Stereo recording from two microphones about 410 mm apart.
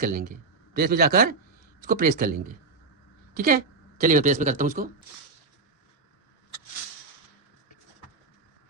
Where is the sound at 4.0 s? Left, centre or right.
Centre.